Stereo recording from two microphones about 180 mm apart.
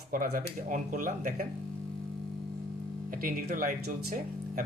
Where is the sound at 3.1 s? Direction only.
50° right (ahead or behind).